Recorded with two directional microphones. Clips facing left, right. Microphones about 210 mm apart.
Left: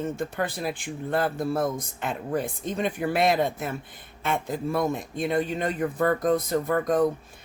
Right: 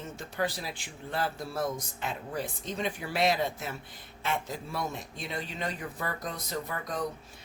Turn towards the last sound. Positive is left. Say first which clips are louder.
# left 12 dB
turn(degrees=50)  # may be behind; listen again after turning